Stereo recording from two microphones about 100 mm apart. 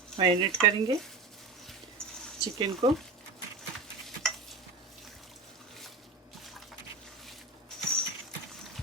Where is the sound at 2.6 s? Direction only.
65° right (ahead or behind).